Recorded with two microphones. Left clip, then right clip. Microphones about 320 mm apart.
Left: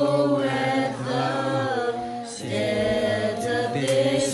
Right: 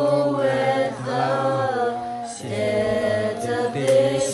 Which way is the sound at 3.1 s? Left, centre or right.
Centre.